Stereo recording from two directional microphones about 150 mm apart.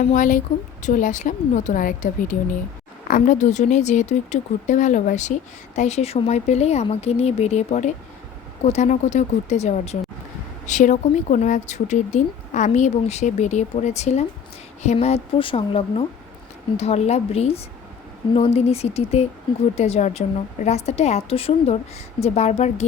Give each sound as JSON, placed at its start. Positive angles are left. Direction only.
{"t": 0.0, "sound": "a woman's voice", "side_deg": 55}